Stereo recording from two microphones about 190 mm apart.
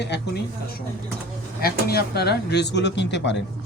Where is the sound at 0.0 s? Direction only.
60° left (ahead or behind).